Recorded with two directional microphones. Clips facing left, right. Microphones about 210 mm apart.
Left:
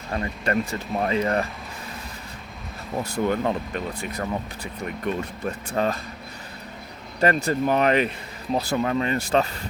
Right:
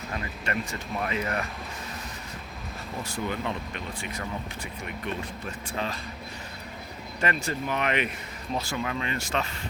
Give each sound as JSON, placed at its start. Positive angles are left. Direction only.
{"t": 0.1, "sound": "speech", "side_deg": 40}
{"t": 3.0, "sound": "speech", "side_deg": 45}
{"t": 5.7, "sound": "speech", "side_deg": 45}
{"t": 7.2, "sound": "speech", "side_deg": 40}